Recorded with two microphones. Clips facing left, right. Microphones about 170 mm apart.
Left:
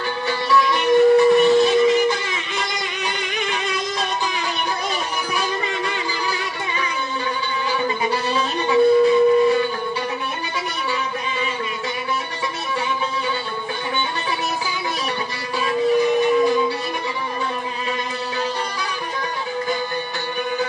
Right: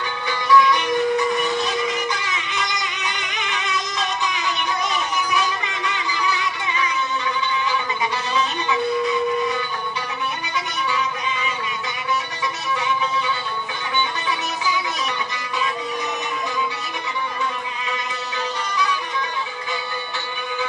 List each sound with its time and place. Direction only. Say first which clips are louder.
0.3 s music: right 3 dB; 30° left (ahead or behind)